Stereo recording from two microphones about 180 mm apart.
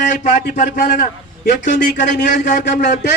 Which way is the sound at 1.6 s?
45° left (ahead or behind).